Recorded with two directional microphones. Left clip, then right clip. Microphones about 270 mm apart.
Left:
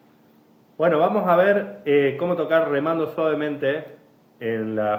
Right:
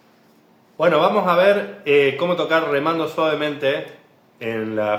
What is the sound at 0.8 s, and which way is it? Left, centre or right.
A man's voice, centre.